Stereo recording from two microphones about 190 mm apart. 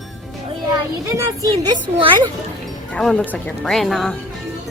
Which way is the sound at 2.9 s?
5° left (ahead or behind).